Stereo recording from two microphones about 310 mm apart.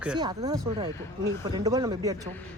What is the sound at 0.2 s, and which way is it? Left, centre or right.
Speech, centre.